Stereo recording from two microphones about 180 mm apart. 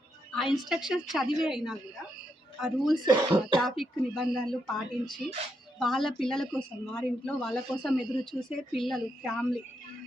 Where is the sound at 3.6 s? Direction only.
Centre (ahead or behind).